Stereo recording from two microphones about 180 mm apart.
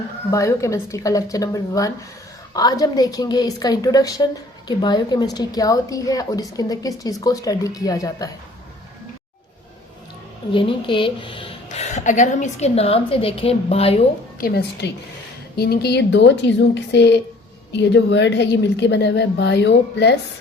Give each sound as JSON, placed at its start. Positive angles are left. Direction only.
{"t": 0.3, "sound": "speech", "side_deg": 15}
{"t": 10.5, "sound": "a woman's voice", "side_deg": 30}
{"t": 14.4, "sound": "a woman's voice", "side_deg": 65}